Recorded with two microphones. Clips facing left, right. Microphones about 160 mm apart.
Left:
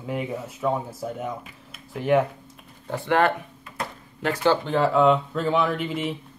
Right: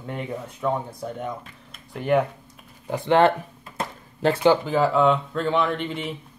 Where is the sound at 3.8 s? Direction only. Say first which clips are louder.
Right 5 dB; 30° right (ahead or behind).